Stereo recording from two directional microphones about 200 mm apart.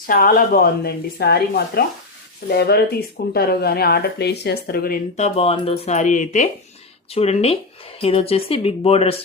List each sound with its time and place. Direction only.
0.1 s speech: 45° left (ahead or behind); by 9.1 s 30° left (ahead or behind)